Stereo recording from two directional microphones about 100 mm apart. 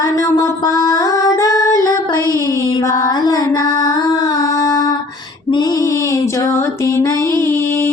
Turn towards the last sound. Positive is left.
turn(degrees=25)  # may be behind; listen again after turning